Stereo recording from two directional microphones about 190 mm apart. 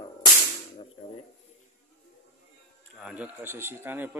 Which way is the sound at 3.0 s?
5° right (ahead or behind).